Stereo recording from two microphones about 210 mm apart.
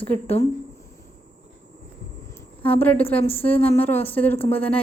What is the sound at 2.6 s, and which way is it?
A woman's voice, 10° left (ahead or behind).